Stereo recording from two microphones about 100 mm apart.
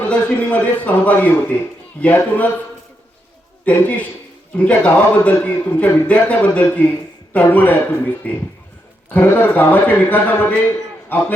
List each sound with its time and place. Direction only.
0.0 s a man's voice: 15° left (ahead or behind)
3.7 s a man's voice: 15° left (ahead or behind)